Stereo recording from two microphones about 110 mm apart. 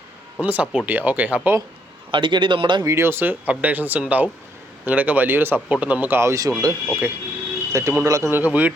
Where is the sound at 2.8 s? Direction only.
25° right (ahead or behind).